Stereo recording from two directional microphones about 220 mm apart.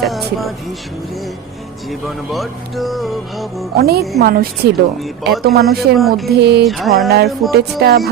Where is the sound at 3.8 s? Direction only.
45° right (ahead or behind).